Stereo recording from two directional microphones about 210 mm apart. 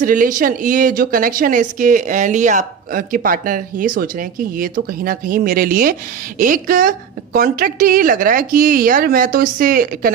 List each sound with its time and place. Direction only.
0.0 s a woman's voice: 40° right (ahead or behind)